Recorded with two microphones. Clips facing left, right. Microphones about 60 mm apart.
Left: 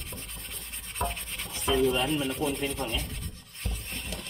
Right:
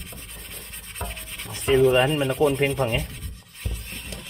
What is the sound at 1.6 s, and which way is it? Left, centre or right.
Rub, right.